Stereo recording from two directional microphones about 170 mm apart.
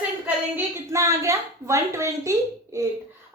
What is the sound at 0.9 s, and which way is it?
A woman's voice, 15° right (ahead or behind).